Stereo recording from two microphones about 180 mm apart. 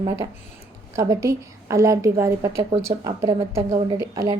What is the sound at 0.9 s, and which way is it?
A woman's voice, 15° right (ahead or behind).